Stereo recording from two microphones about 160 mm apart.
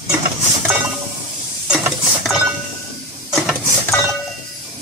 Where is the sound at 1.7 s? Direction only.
5° right (ahead or behind).